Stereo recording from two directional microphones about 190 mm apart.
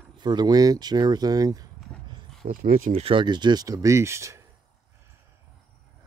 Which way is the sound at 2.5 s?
45° right (ahead or behind).